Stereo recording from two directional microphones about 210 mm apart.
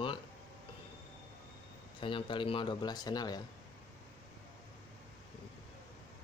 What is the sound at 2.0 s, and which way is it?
Speech, 25° left (ahead or behind).